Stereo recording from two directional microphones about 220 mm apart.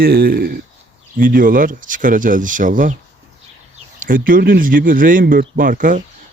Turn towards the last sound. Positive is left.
turn(degrees=-35)  # may be behind; listen again after turning